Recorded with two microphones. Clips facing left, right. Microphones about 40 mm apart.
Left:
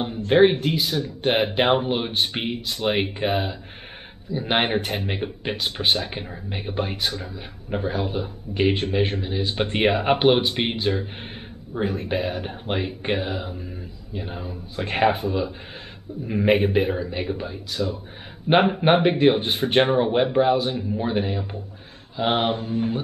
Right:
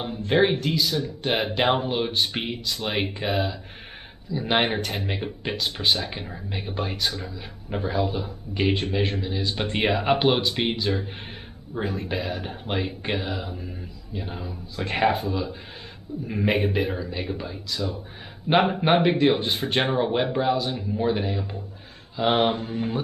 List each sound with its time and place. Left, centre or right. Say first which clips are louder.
0.0 s a man's voice: left 5 dB; centre
12.1 s a man's voice: left 3 dB; left
16.9 s a man's voice: left 3 dB; left; by 22.9 s centre